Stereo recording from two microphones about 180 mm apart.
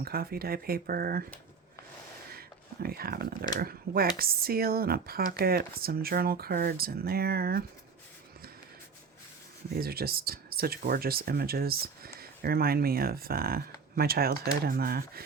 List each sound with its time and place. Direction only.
0.0 s speech: 55° right (ahead or behind)
2.8 s speech: 55° right (ahead or behind)
9.7 s speech: 55° right (ahead or behind)